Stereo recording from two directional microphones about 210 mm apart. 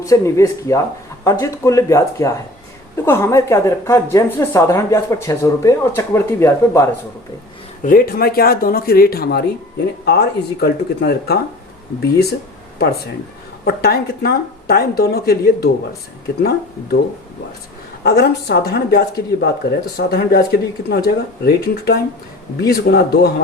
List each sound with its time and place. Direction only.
0.0 s speech: 15° left (ahead or behind)
7.9 s speech: 45° left (ahead or behind)
13.7 s speech: 45° left (ahead or behind)
18.0 s speech: 50° left (ahead or behind)